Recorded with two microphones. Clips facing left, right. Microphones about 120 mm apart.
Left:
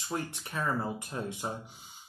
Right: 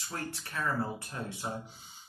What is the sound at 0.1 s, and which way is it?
Speech, 15° left (ahead or behind).